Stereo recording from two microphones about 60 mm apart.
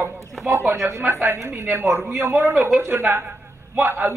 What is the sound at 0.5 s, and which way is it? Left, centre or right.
Speech, right.